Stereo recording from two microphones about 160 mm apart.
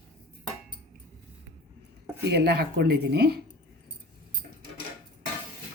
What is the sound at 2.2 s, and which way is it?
A woman's voice, 90° right.